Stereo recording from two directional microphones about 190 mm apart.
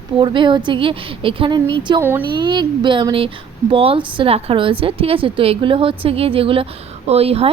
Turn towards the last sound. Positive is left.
turn(degrees=-30)  # may be behind; listen again after turning